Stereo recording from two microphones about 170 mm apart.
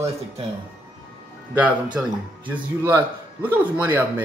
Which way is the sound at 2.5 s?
15° right (ahead or behind).